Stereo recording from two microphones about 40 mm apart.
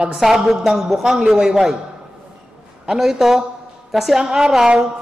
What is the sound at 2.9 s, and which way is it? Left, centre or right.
A man's voice, centre.